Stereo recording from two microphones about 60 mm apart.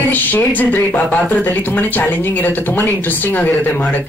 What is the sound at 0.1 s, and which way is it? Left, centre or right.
Speech, left.